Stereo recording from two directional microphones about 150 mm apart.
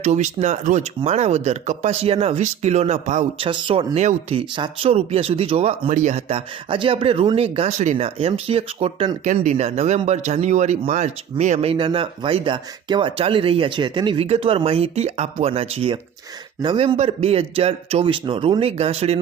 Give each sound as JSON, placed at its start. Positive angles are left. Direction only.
{"t": 0.0, "sound": "speech", "side_deg": -50}
{"t": 3.3, "sound": "speech", "side_deg": -35}
{"t": 9.2, "sound": "speech", "side_deg": -55}
{"t": 16.6, "sound": "speech", "side_deg": -30}
{"t": 16.8, "sound": "speech", "side_deg": -40}